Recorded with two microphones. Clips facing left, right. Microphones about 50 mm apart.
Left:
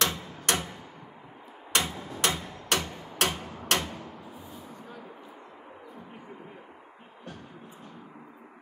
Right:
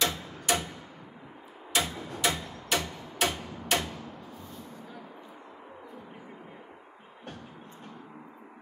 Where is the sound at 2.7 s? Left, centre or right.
Left.